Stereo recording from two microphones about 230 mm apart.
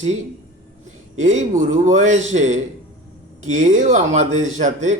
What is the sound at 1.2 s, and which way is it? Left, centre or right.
Speech, right.